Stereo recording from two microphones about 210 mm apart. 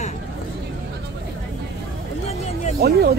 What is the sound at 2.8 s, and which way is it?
Speech, 50° right (ahead or behind).